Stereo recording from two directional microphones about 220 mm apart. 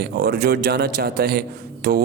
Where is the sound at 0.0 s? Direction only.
45° right (ahead or behind).